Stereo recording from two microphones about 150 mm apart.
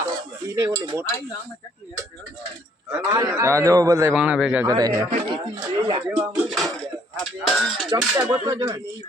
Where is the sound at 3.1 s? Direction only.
20° right (ahead or behind).